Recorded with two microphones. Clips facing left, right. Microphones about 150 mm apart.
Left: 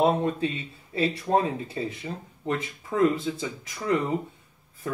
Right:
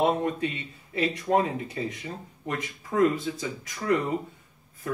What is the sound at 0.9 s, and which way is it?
Speech, 30° left (ahead or behind).